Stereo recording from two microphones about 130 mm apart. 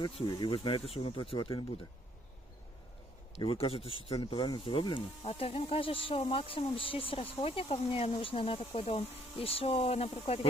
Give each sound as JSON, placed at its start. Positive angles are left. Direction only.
{"t": 0.3, "sound": "speech", "side_deg": 35}
{"t": 3.3, "sound": "speech", "side_deg": 45}